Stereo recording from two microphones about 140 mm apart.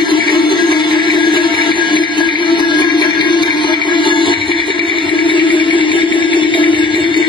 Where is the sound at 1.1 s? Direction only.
35° left (ahead or behind).